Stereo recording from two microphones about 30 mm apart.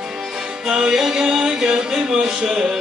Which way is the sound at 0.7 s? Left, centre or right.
Right.